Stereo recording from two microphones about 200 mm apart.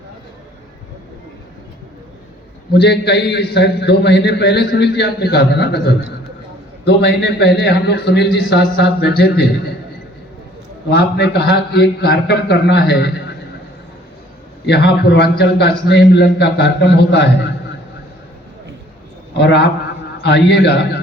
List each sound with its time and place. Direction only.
2.7 s a man's voice: 55° left (ahead or behind)
10.8 s a man's voice: 55° left (ahead or behind)
14.7 s a man's voice: 55° left (ahead or behind)
19.4 s a man's voice: 60° left (ahead or behind)